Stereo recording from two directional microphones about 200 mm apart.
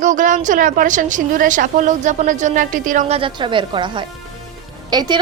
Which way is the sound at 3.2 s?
25° right (ahead or behind).